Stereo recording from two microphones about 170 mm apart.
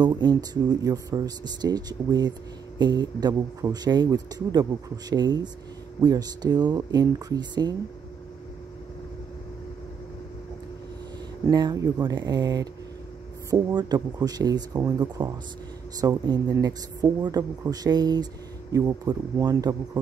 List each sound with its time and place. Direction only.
0.0 s speech: 25° right (ahead or behind)
11.4 s speech: 20° right (ahead or behind)